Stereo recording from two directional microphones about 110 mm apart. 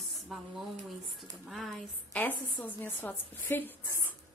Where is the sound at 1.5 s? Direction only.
Centre (ahead or behind).